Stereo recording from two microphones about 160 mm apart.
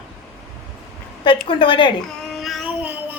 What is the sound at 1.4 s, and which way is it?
Speech, 30° left (ahead or behind).